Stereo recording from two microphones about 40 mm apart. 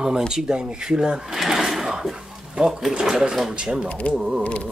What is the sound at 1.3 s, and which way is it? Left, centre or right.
Drawer open or close, centre.